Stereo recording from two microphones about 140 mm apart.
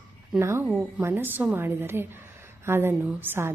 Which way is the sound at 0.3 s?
20° right (ahead or behind).